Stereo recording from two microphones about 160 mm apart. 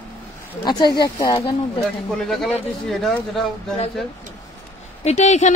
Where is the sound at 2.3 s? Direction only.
Centre (ahead or behind).